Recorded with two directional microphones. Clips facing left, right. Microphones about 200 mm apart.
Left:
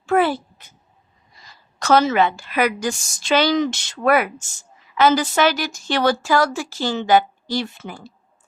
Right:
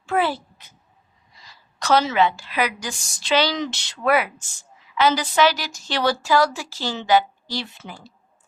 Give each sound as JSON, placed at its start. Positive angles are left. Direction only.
{"t": 0.0, "sound": "a child's voice", "side_deg": 50}
{"t": 1.8, "sound": "speech", "side_deg": 50}